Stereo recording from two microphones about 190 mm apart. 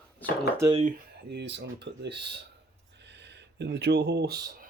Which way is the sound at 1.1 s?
65° right (ahead or behind).